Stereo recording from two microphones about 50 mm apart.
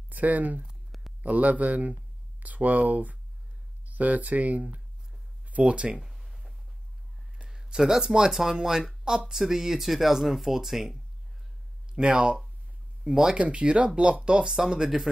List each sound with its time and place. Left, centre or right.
0.1 s speech: right
5.9 s a sound: centre
7.4 s speech: centre